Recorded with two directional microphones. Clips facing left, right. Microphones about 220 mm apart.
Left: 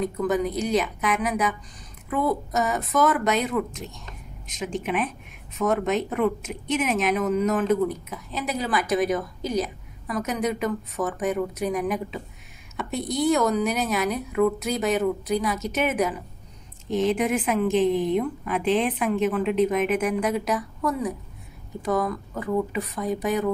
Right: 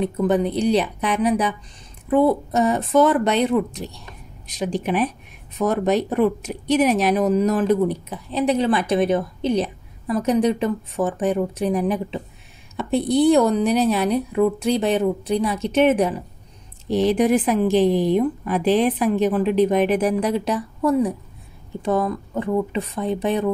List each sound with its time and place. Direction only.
0.2 s a woman's voice: 30° right (ahead or behind)